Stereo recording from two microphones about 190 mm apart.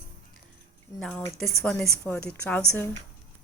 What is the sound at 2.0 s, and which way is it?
Speech, 5° left (ahead or behind).